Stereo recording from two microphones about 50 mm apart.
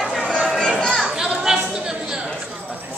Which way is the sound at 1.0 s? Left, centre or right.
Centre.